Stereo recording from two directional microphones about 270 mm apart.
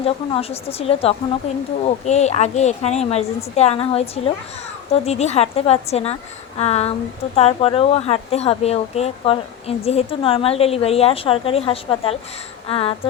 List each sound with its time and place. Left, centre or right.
0.0 s speech: left